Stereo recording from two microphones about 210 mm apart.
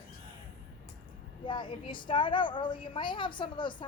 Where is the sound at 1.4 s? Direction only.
25° left (ahead or behind).